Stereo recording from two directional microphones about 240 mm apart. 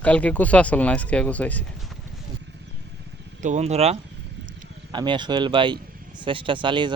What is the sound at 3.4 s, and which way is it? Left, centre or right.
Speech, right.